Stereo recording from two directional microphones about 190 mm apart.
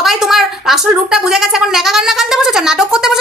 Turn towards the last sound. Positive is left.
turn(degrees=0)  # may be behind; listen again after turning